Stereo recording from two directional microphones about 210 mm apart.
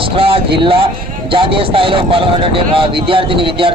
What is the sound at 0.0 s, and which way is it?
Speech, 25° right (ahead or behind).